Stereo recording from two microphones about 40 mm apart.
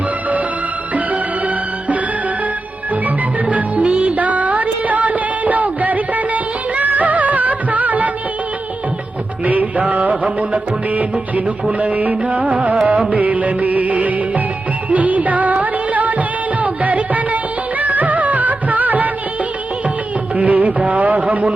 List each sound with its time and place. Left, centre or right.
0.9 s music: right
3.4 s music: right
9.4 s music: right
11.8 s music of bollywood: right
14.8 s music: right
20.3 s music: right